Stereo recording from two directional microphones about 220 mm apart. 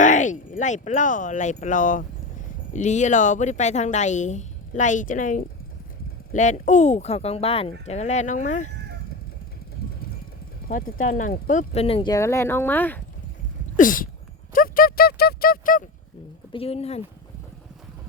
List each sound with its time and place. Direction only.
0.0 s a woman's voice: 35° left (ahead or behind)
9.8 s vehicle: 45° left (ahead or behind)
10.7 s speech: 40° left (ahead or behind); by 13.0 s 10° left (ahead or behind)
13.7 s a woman's voice: 40° left (ahead or behind)
16.5 s speech: 25° left (ahead or behind)